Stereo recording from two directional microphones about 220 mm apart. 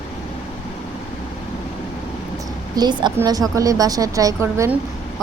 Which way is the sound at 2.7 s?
20° right (ahead or behind).